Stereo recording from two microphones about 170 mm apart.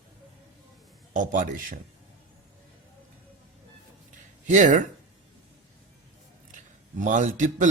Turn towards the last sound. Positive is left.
turn(degrees=-45)  # may be behind; listen again after turning